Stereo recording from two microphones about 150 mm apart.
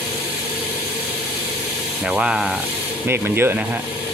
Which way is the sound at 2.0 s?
5° right (ahead or behind).